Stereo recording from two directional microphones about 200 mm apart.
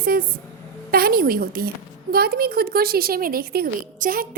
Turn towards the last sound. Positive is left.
turn(degrees=-45)  # may be behind; listen again after turning